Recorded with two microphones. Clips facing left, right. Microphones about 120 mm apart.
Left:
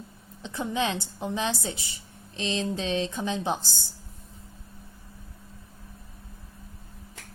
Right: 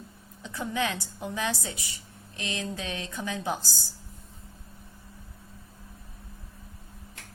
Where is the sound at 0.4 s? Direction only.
25° left (ahead or behind).